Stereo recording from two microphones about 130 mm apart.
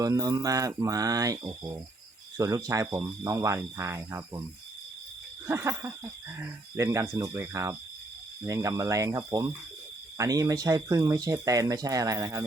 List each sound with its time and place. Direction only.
0.0 s speech: 30° right (ahead or behind)
2.4 s speech: 25° right (ahead or behind)
5.5 s speech: 20° right (ahead or behind)